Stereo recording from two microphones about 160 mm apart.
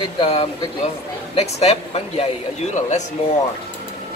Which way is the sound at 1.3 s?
40° left (ahead or behind).